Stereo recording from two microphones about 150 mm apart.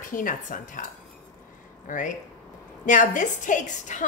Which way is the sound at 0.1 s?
65° left (ahead or behind).